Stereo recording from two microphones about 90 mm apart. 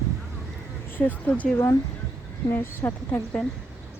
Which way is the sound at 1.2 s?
15° left (ahead or behind).